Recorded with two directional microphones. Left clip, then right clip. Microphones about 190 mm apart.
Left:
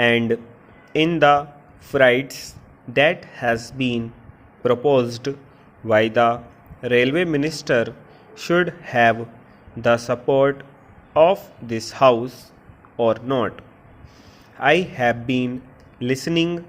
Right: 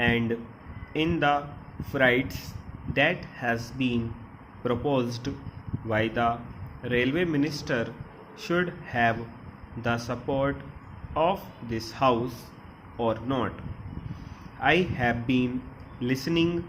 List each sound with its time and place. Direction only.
0.0 s speech: 40° left (ahead or behind)
14.6 s speech: 45° left (ahead or behind)